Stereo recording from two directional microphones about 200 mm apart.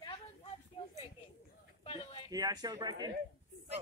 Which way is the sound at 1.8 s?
25° left (ahead or behind).